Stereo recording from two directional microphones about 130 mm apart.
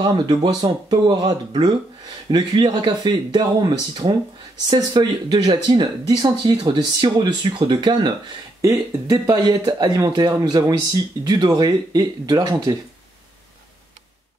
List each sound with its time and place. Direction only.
0.0 s speech: 35° right (ahead or behind)